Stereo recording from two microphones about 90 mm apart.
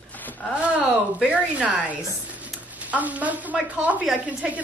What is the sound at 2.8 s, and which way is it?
A woman's voice, 15° right (ahead or behind).